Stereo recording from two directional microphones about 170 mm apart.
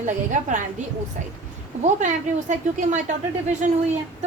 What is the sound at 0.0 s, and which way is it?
Speech, 45° right (ahead or behind).